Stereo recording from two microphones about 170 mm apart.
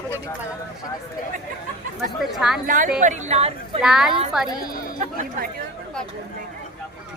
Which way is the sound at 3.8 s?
5° right (ahead or behind).